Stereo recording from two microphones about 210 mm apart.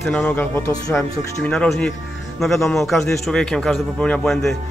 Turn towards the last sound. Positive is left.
turn(degrees=0)  # may be behind; listen again after turning